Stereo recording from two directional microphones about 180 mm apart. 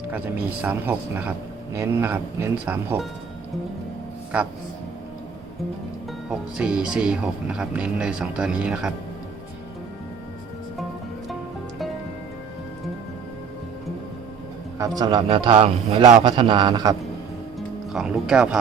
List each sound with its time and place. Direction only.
0.6 s speech: 10° right (ahead or behind)
6.3 s speech: 5° right (ahead or behind)
14.8 s a man's voice: 20° right (ahead or behind)
17.9 s speech: 5° right (ahead or behind)